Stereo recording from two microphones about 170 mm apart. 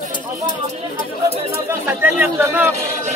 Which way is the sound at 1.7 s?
10° right (ahead or behind).